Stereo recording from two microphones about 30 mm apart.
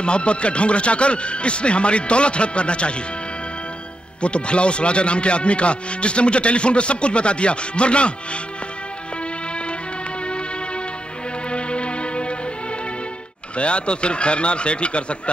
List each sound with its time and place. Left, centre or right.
0.0 s speech: left
4.2 s speech: left
9.5 s music: left
13.6 s speech: left